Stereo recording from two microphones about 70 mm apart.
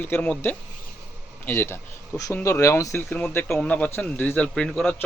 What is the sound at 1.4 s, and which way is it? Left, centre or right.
Speech, left.